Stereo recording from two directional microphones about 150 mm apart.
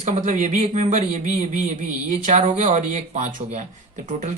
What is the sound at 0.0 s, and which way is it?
Speech, 55° right (ahead or behind).